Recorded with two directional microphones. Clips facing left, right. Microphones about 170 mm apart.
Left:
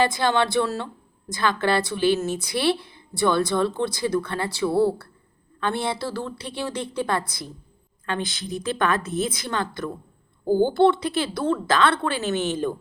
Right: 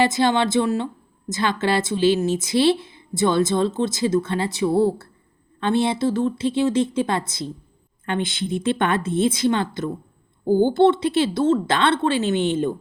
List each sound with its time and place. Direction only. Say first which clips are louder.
0.0 s speech: right 2 dB; 20° right (ahead or behind)